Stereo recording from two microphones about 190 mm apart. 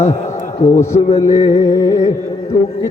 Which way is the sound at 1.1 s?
35° left (ahead or behind).